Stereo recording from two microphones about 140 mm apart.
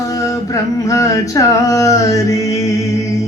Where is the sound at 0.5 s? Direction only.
20° left (ahead or behind).